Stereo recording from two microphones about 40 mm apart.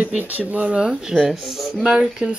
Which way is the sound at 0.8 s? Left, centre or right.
Centre.